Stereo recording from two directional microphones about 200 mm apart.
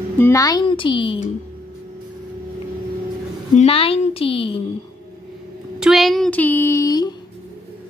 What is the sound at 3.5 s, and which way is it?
A woman's voice, 30° left (ahead or behind).